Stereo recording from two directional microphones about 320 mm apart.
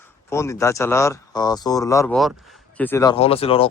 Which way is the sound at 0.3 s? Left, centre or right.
Centre.